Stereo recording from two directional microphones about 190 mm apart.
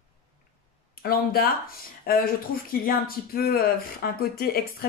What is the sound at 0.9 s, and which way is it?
Speech, 50° left (ahead or behind).